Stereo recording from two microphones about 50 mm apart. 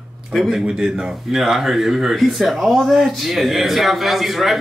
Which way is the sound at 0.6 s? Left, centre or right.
Centre.